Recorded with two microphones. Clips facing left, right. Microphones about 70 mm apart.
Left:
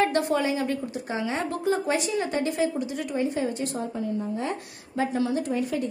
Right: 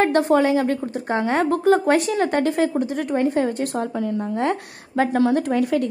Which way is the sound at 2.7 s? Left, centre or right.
Right.